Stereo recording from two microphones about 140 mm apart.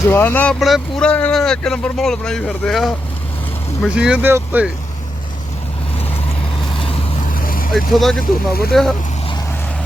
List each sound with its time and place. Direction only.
0.0 s speech: 15° left (ahead or behind)
0.6 s speech: centre (ahead or behind); by 4.6 s 15° right (ahead or behind)
7.3 s vehicle: 90° left
7.7 s speech: centre (ahead or behind)
8.2 s speech: 90° left
8.7 s speech: centre (ahead or behind)